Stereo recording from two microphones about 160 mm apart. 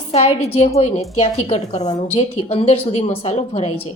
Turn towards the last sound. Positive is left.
turn(degrees=40)  # may be behind; listen again after turning